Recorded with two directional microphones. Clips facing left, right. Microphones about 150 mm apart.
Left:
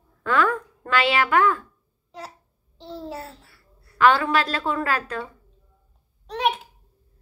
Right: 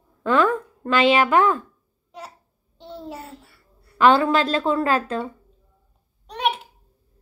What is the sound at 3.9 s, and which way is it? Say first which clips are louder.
A woman's voice: right 3 dB; 20° right (ahead or behind).